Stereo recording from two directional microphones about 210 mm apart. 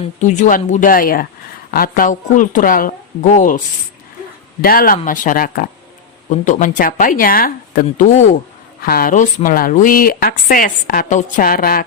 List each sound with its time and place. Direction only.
0.2 s speech: 35° left (ahead or behind)
4.6 s a woman's voice: 45° left (ahead or behind)